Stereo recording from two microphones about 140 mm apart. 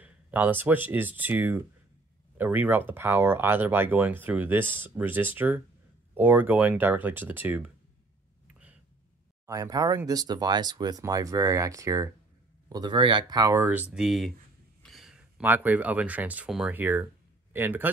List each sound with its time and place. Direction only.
0.0 s speech: 10° right (ahead or behind)
9.5 s speech: 25° right (ahead or behind)